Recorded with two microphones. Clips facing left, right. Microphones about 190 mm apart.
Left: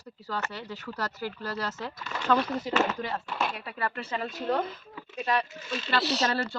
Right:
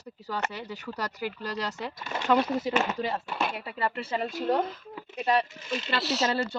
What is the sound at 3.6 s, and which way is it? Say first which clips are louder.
Speech: right 2 dB; 25° right (ahead or behind).